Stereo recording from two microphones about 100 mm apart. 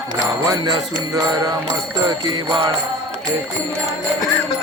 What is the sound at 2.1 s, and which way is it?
Jingle bell, 50° right (ahead or behind).